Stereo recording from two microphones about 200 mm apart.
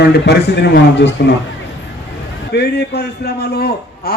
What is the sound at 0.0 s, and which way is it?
A man's voice, 55° left (ahead or behind).